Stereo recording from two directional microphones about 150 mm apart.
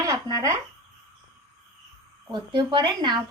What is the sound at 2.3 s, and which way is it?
Speech, 30° right (ahead or behind).